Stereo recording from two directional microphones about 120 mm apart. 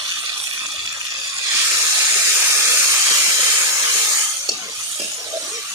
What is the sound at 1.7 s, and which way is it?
Steam, 20° right (ahead or behind).